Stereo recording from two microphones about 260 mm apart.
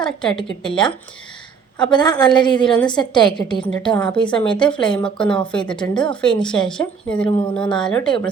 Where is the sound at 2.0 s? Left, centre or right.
Centre.